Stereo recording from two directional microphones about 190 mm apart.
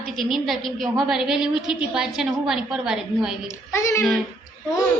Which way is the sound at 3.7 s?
15° left (ahead or behind).